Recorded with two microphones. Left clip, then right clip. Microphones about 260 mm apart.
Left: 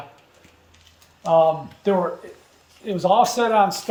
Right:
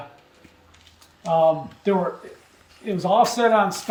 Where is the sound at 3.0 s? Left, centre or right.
Centre.